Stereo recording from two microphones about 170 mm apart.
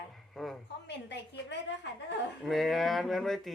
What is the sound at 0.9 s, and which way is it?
Speech, 90° left.